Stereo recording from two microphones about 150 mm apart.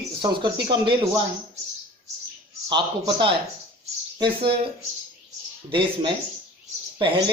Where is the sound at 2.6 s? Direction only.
30° right (ahead or behind).